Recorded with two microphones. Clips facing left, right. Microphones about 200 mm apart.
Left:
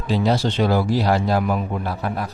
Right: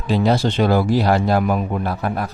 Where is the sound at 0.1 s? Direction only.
55° right (ahead or behind).